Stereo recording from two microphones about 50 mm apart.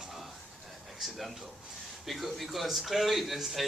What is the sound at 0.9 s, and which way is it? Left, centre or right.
A man's voice, centre.